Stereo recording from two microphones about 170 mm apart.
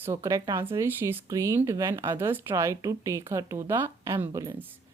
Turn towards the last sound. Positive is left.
turn(degrees=-15)  # may be behind; listen again after turning